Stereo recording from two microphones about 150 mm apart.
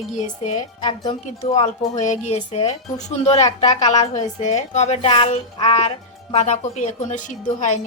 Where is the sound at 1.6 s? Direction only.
55° left (ahead or behind).